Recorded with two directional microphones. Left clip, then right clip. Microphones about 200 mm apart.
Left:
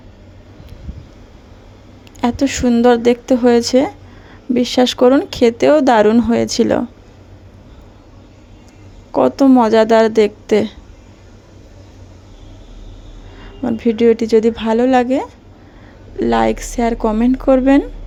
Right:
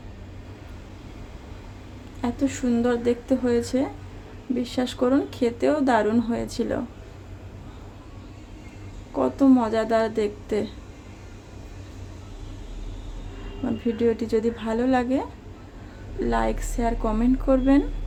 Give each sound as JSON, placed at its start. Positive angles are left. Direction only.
{"t": 2.2, "sound": "speech", "side_deg": 45}
{"t": 9.1, "sound": "a woman's voice", "side_deg": 45}
{"t": 13.7, "sound": "speech", "side_deg": 40}